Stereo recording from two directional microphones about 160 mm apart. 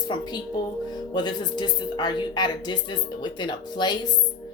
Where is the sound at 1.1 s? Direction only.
25° left (ahead or behind).